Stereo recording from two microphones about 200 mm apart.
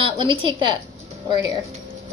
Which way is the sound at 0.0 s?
25° right (ahead or behind).